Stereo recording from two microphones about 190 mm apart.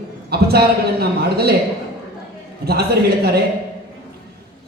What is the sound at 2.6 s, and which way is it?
Speech, 55° right (ahead or behind).